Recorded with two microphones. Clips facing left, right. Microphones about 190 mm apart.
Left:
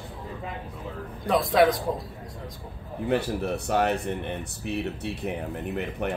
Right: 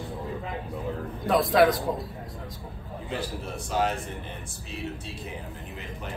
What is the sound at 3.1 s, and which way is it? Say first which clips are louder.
Speech: left 8 dB; 65° left (ahead or behind).